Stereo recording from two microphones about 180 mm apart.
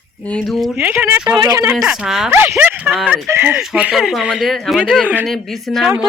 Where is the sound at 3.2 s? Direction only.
10° right (ahead or behind).